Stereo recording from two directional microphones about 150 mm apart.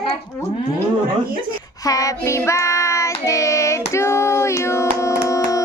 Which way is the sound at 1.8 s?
25° left (ahead or behind).